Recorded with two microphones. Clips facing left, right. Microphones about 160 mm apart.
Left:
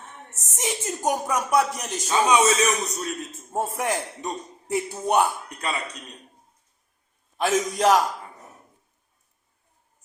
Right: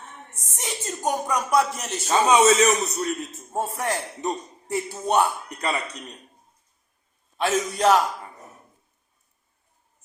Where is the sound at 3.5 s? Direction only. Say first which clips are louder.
Left 1 dB; 10° left (ahead or behind).